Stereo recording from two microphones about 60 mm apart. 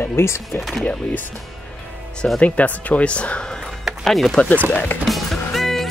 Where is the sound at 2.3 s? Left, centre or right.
Left.